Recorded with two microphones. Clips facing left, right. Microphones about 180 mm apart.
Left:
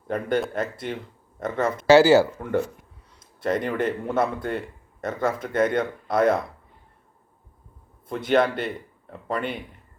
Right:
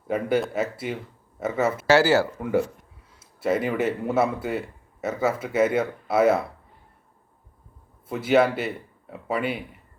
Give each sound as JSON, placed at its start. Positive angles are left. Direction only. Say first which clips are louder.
{"t": 0.1, "sound": "speech", "louder": "right 1 dB", "side_deg": -5}
{"t": 1.9, "sound": "speech", "louder": "left 5 dB", "side_deg": 15}
{"t": 3.2, "sound": "speech", "louder": "right 1 dB", "side_deg": -5}
{"t": 8.0, "sound": "speech", "louder": "right 1 dB", "side_deg": -5}